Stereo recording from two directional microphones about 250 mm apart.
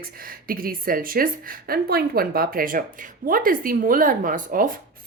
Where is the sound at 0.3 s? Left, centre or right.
Right.